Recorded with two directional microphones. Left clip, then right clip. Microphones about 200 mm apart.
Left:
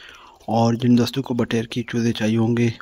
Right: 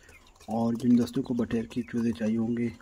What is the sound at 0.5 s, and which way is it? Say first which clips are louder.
Speech: left 8 dB; 25° left (ahead or behind).